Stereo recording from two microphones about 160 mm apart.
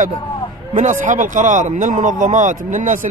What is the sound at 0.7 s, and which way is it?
A man's voice, 50° right (ahead or behind).